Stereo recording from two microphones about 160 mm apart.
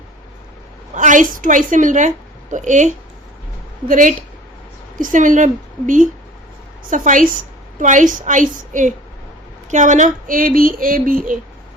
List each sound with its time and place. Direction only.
0.9 s a woman's voice: 50° right (ahead or behind)